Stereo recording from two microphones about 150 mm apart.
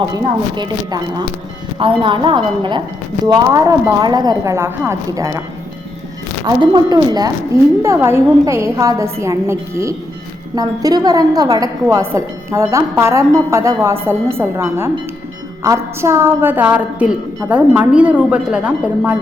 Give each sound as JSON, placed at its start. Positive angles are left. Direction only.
{"t": 0.1, "sound": "a woman's voice", "side_deg": -30}
{"t": 6.9, "sound": "a woman's voice", "side_deg": -25}